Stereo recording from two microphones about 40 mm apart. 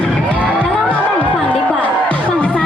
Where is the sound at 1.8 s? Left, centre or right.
Left.